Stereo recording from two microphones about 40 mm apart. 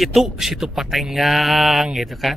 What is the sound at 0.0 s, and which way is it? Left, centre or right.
Speech, centre.